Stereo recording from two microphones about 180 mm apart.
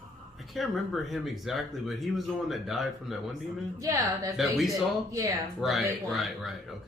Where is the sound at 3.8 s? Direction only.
20° right (ahead or behind).